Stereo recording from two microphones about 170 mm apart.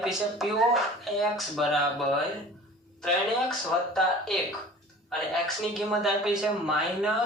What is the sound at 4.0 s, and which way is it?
Speech, centre (ahead or behind).